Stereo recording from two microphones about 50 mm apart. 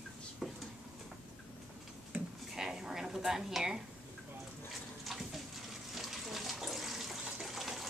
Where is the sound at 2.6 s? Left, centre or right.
Centre.